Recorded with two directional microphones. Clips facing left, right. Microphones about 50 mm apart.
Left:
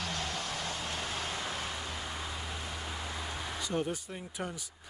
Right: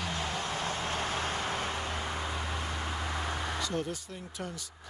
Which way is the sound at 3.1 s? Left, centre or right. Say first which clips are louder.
Right 5 dB; right.